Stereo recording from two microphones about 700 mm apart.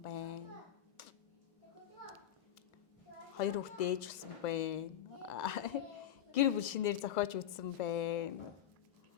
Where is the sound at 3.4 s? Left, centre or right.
Left.